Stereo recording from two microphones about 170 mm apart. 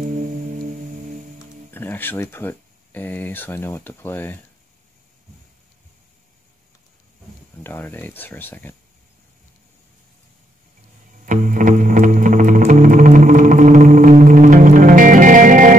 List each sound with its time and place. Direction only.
0.0 s music: 50° right (ahead or behind)
1.7 s speech: 10° left (ahead or behind)
7.6 s speech: 10° left (ahead or behind)
11.2 s music: 50° right (ahead or behind)